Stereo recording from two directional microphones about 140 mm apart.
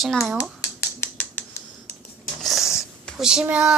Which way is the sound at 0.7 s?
15° left (ahead or behind).